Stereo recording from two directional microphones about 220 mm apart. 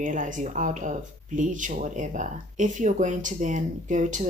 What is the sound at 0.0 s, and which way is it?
Speech, 35° right (ahead or behind).